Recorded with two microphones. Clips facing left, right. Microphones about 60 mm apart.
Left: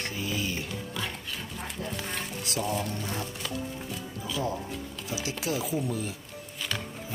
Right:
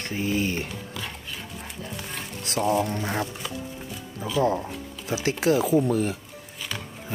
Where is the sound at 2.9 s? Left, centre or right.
Right.